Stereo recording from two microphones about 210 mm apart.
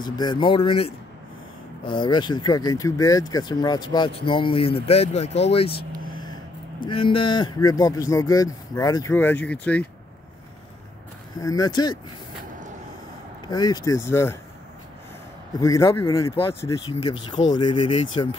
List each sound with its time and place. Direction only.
0.0 s speech: 20° left (ahead or behind)
6.9 s speech: 25° left (ahead or behind); by 9.8 s 5° left (ahead or behind)
11.4 s speech: 15° left (ahead or behind)
13.5 s speech: 20° left (ahead or behind)
15.6 s speech: 15° left (ahead or behind)